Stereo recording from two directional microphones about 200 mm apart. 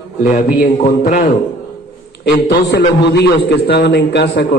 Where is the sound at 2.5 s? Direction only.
60° left (ahead or behind).